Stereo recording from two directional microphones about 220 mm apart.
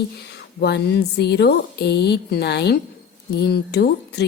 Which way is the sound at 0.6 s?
50° left (ahead or behind).